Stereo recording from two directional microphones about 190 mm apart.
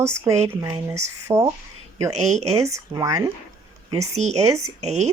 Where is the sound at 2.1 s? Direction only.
35° right (ahead or behind).